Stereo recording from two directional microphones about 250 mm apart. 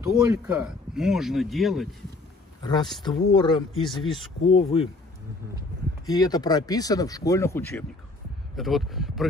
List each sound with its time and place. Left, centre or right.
0.0 s speech: centre
2.6 s speech: centre
6.0 s speech: centre